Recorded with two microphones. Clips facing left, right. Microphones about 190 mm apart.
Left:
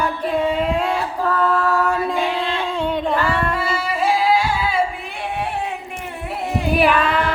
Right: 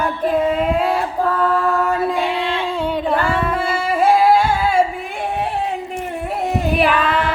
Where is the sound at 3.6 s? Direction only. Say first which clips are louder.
Right 4 dB; 50° right (ahead or behind).